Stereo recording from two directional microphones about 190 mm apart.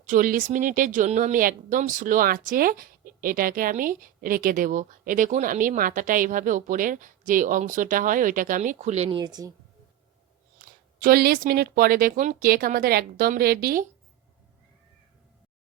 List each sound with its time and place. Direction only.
0.1 s speech: 45° right (ahead or behind)
9.0 s speech: 20° right (ahead or behind)
11.0 s speech: 55° right (ahead or behind)